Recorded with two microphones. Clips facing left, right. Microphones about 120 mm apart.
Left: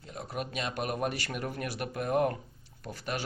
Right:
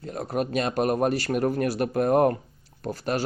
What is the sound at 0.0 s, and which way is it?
Speech, 40° right (ahead or behind).